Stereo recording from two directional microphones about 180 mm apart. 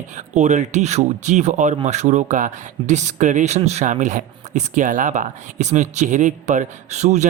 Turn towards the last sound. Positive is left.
turn(degrees=-40)  # may be behind; listen again after turning